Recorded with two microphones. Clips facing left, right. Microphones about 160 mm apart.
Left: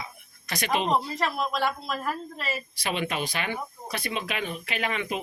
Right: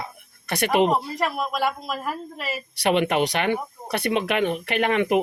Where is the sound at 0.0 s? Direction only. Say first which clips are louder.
Right 5 dB; 60° right (ahead or behind).